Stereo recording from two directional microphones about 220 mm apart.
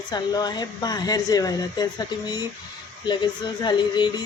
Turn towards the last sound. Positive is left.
turn(degrees=20)  # may be behind; listen again after turning